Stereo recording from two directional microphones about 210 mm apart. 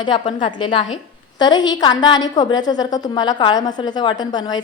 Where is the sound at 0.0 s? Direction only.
20° left (ahead or behind).